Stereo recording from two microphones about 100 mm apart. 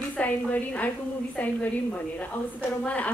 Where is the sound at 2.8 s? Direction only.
10° left (ahead or behind).